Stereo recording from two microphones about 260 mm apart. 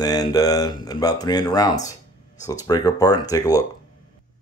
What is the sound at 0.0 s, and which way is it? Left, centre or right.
Speech, centre.